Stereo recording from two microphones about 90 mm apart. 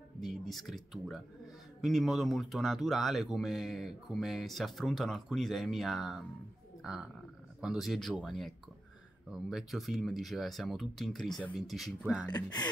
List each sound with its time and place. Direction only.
0.2 s speech: centre (ahead or behind)
12.0 s speech: 15° right (ahead or behind)
12.3 s speech: 50° left (ahead or behind)